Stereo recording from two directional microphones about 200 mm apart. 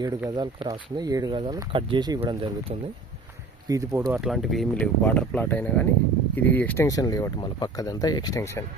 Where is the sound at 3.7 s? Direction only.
15° right (ahead or behind).